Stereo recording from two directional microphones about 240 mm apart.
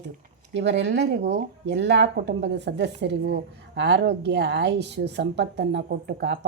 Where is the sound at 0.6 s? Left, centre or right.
Right.